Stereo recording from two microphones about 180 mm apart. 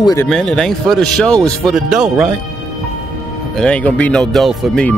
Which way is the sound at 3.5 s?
5° left (ahead or behind).